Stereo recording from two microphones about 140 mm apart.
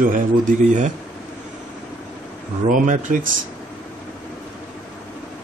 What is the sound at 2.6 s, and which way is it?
Speech, 70° right (ahead or behind).